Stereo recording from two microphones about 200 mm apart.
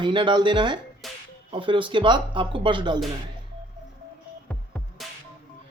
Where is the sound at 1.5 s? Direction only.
25° right (ahead or behind).